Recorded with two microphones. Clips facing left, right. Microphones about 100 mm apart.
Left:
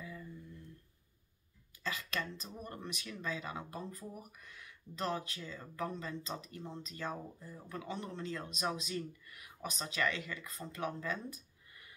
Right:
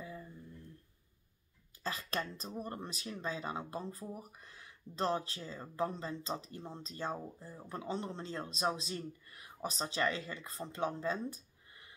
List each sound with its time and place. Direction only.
0.0 s humming: 35° right (ahead or behind)
1.8 s speech: 35° right (ahead or behind)